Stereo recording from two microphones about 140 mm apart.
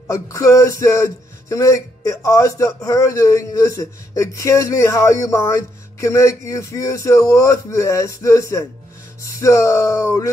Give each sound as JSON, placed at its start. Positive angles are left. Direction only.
{"t": 0.1, "sound": "music", "side_deg": 20}